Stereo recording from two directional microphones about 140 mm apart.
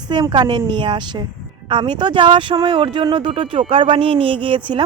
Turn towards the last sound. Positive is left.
turn(degrees=-35)  # may be behind; listen again after turning